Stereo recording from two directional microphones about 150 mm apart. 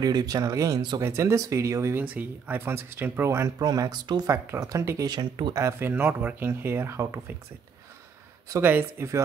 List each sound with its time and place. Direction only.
0.0 s speech: 25° right (ahead or behind)
8.5 s speech: 15° right (ahead or behind)